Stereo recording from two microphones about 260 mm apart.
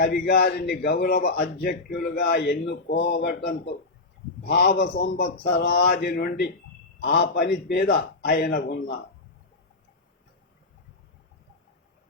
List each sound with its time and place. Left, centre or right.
0.0 s a man's voice: left